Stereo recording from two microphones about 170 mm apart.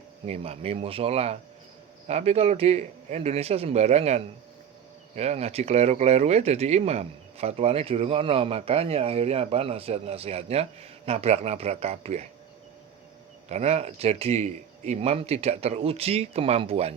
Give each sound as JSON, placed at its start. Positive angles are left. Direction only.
{"t": 0.3, "sound": "speech", "side_deg": -40}
{"t": 13.5, "sound": "speech", "side_deg": -40}